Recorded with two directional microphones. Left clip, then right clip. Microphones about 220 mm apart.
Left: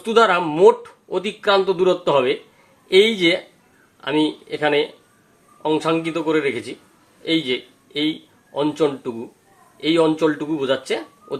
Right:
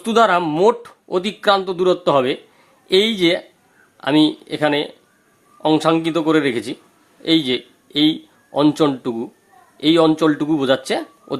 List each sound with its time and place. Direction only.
0.0 s speech: 50° right (ahead or behind)